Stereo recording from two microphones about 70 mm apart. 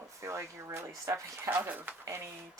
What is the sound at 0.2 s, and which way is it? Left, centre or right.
Speech, right.